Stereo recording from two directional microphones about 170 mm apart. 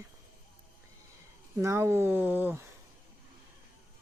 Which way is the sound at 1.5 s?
15° right (ahead or behind).